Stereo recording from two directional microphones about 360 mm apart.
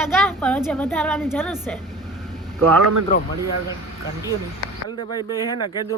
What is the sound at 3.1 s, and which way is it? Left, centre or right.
Speech, left.